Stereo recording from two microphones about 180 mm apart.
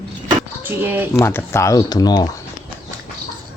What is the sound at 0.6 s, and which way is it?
Speech, 10° right (ahead or behind).